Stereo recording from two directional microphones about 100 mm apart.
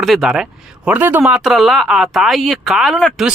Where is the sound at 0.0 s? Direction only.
Centre (ahead or behind).